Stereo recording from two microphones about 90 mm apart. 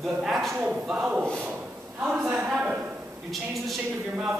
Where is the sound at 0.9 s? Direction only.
15° right (ahead or behind).